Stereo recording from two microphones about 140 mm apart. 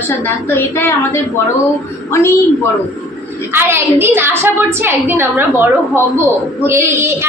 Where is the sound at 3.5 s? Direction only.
15° right (ahead or behind).